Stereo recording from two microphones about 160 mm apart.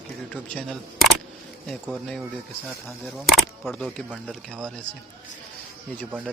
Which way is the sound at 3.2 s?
Centre (ahead or behind).